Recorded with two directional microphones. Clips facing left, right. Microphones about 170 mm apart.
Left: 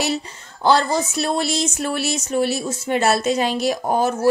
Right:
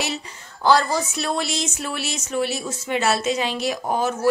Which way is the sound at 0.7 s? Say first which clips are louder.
Left 1 dB; 25° left (ahead or behind).